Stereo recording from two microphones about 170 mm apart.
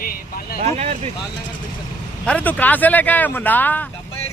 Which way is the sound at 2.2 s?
10° left (ahead or behind).